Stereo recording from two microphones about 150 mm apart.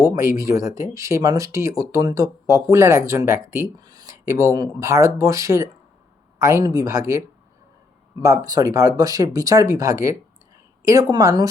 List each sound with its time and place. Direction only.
0.0 s speech: 20° right (ahead or behind)